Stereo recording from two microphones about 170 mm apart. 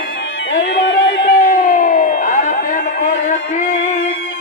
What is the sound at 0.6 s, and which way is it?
Music, 90° left.